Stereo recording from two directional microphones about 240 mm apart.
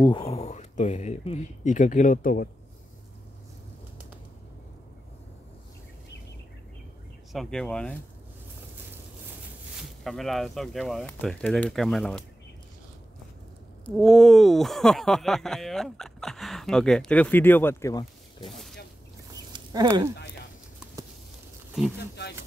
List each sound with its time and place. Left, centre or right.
0.0 s speech: left
7.3 s speech: centre
9.8 s speech: centre
13.9 s speech: centre
19.5 s speech: centre